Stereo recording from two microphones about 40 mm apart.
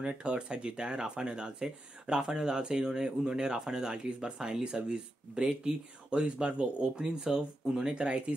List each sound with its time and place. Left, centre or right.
0.0 s speech: right
6.0 s speech: right